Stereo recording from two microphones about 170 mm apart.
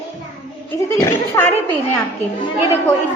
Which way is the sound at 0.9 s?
15° left (ahead or behind).